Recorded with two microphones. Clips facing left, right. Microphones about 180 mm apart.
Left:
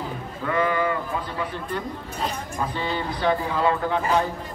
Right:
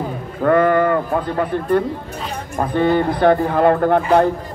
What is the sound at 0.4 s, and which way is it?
Bleat, 55° right (ahead or behind).